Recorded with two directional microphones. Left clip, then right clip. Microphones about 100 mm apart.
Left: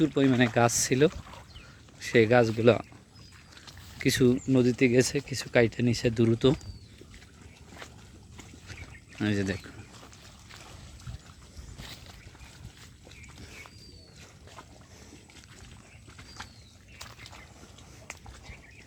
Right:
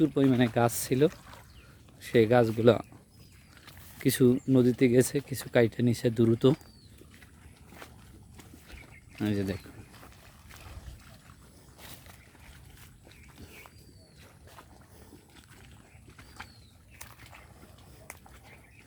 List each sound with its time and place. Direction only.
0.0 s speech: 20° right (ahead or behind)
4.0 s speech: 30° right (ahead or behind)
8.6 s duck: 15° right (ahead or behind)
9.2 s speech: 10° right (ahead or behind)
11.8 s a sound: 15° right (ahead or behind)